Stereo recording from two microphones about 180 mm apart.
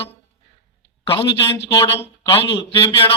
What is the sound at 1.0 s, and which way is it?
A man's voice, 30° left (ahead or behind).